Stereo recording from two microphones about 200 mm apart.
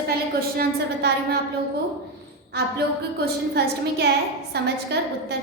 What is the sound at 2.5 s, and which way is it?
A woman's voice, 55° right (ahead or behind).